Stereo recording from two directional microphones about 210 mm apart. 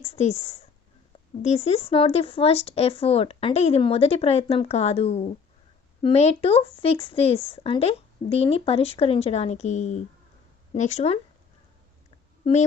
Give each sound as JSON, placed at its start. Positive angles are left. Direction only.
{"t": 0.0, "sound": "speech", "side_deg": 30}